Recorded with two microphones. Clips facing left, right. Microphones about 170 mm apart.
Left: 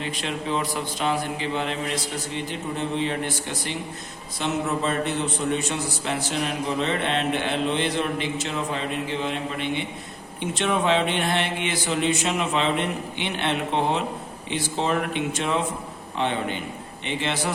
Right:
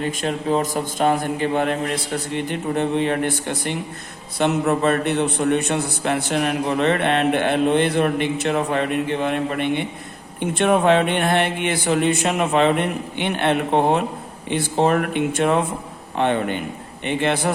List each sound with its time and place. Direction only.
0.0 s a man's voice: 45° right (ahead or behind)